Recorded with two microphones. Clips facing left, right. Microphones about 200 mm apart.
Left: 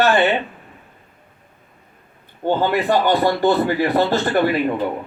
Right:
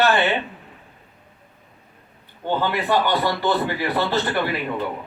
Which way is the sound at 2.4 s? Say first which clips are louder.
Left 5 dB; 45° left (ahead or behind).